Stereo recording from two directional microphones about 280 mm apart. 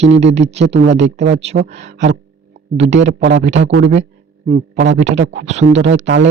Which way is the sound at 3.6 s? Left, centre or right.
Right.